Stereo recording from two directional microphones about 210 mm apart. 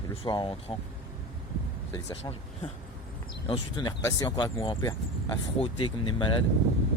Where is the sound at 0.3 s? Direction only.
25° left (ahead or behind).